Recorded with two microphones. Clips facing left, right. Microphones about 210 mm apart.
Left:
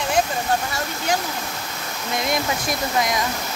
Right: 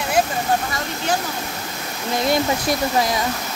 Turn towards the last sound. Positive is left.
turn(degrees=-30)  # may be behind; listen again after turning